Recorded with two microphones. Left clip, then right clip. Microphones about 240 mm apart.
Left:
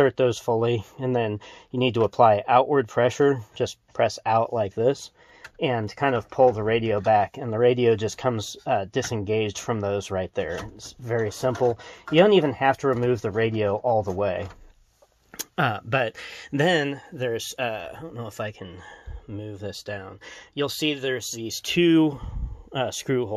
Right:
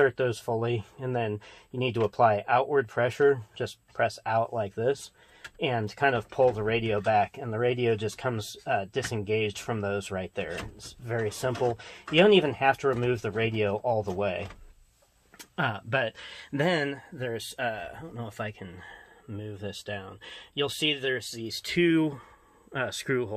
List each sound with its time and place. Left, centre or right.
0.0 s speech: left; by 23.3 s centre